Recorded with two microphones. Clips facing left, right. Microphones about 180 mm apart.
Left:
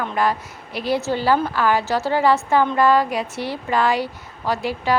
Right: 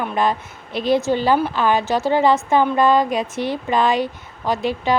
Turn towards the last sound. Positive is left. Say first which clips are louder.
# right 2 dB
turn(degrees=-20)  # may be behind; listen again after turning